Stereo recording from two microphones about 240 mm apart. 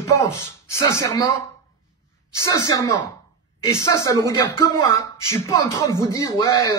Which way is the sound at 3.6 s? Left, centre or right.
Centre.